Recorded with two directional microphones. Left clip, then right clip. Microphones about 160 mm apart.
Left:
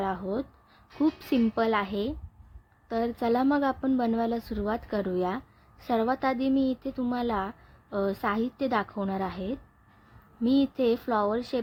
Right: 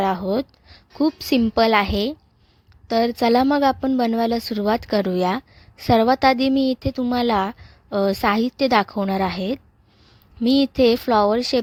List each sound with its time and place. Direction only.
0.0 s a woman's voice: 60° right (ahead or behind)